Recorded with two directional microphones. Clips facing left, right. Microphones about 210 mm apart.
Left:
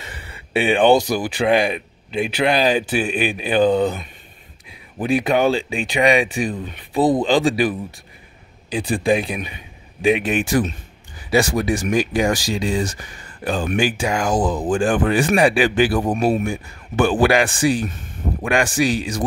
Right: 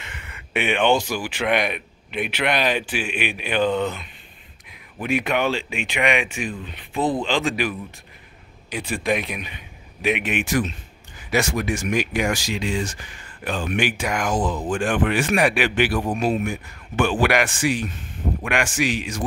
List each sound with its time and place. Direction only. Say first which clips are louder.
0.0 s speech: left 3 dB; 35° left (ahead or behind)